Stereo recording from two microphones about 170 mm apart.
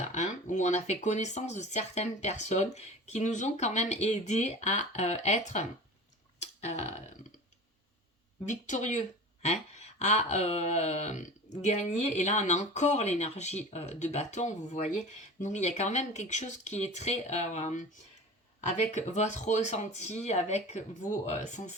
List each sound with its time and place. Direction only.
0.0 s speech: 45° left (ahead or behind)
6.4 s a sound: 40° left (ahead or behind)
8.4 s speech: 45° left (ahead or behind)